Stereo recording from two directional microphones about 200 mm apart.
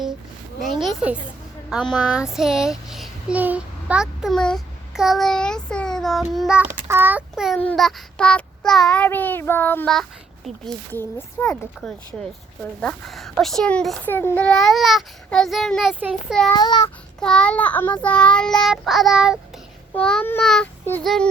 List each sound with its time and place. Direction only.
0.6 s child singing: centre (ahead or behind)
16.5 s a sound: 20° left (ahead or behind)
17.2 s child singing: 5° left (ahead or behind)